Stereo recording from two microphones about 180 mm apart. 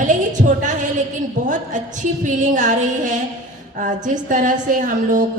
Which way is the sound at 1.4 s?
45° right (ahead or behind).